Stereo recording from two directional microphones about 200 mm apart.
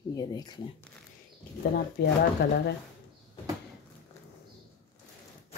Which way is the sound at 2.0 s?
55° left (ahead or behind).